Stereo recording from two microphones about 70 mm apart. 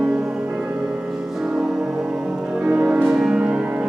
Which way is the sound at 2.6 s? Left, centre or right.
Centre.